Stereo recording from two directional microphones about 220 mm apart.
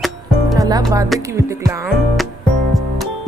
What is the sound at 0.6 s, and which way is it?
Music, 15° right (ahead or behind).